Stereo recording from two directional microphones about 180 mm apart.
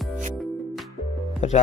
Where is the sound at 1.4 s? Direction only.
40° left (ahead or behind).